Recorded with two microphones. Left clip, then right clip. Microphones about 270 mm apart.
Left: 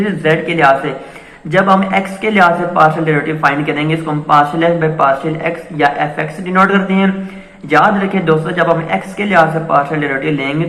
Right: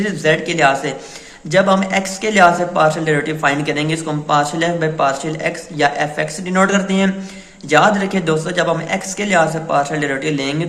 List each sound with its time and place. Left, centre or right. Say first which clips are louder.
0.0 s a man's voice: left 2 dB; right